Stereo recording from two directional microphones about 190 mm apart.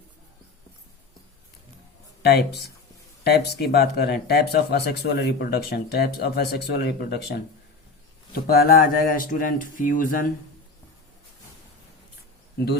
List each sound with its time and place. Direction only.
2.2 s speech: 55° left (ahead or behind)